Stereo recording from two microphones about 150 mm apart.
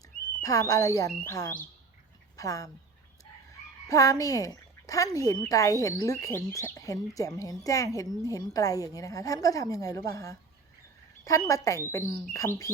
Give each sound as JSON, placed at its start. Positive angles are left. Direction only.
{"t": 0.4, "sound": "speech", "side_deg": 25}
{"t": 3.8, "sound": "speech", "side_deg": 20}